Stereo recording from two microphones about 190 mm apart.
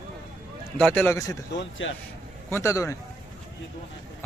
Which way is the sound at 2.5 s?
15° left (ahead or behind).